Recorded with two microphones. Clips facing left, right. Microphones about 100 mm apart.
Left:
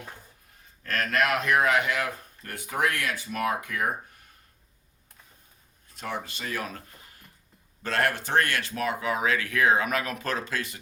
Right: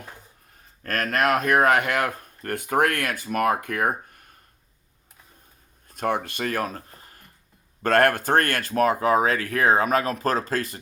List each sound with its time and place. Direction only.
0.8 s speech: 45° right (ahead or behind)
5.9 s speech: 55° right (ahead or behind)
7.8 s speech: 55° right (ahead or behind)